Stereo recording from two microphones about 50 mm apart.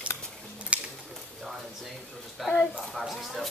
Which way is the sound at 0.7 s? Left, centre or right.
Right.